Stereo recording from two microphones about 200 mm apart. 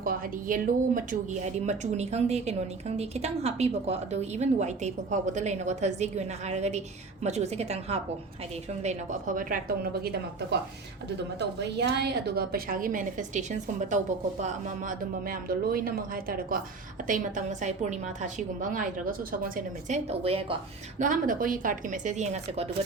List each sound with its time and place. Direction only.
0.0 s a woman's voice: 45° right (ahead or behind)
20.1 s a woman's voice: 30° right (ahead or behind)
21.0 s a woman's voice: 40° right (ahead or behind)